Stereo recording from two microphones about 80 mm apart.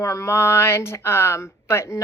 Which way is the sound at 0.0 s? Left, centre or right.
Left.